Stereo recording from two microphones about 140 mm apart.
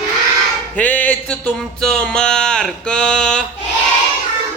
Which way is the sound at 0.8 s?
10° left (ahead or behind).